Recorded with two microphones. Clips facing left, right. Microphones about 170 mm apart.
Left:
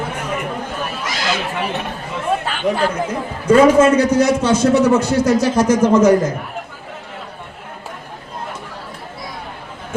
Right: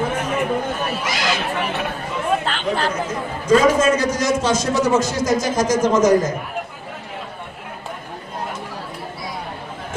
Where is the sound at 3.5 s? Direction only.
60° left (ahead or behind).